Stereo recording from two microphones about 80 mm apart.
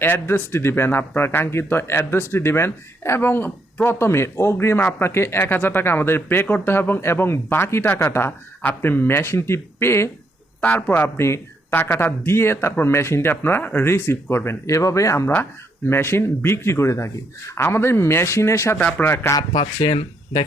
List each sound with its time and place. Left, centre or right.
0.0 s speech: left
10.6 s speech: centre
19.3 s speech: left